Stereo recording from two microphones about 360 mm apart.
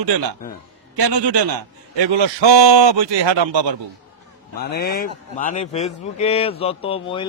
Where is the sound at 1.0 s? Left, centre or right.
Right.